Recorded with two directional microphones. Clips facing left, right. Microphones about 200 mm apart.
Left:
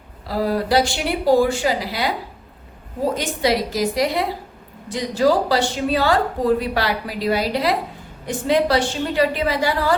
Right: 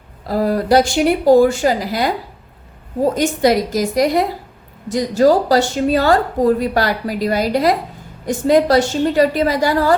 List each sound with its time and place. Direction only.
0.3 s a woman's voice: 45° right (ahead or behind)
3.2 s a woman's voice: 45° right (ahead or behind)